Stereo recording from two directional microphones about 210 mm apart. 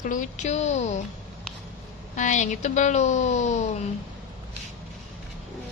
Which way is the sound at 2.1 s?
35° left (ahead or behind).